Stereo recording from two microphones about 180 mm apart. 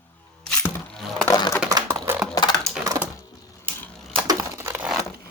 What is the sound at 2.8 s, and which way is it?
Typing, 15° right (ahead or behind).